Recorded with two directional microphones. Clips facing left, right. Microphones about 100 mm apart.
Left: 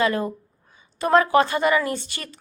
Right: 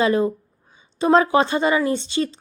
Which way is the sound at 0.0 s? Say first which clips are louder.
Right 4 dB; 25° right (ahead or behind).